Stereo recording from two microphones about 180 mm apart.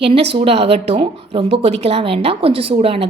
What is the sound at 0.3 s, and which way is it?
A woman's voice, 35° right (ahead or behind).